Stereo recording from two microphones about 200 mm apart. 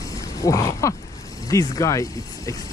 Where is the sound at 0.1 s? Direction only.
15° left (ahead or behind).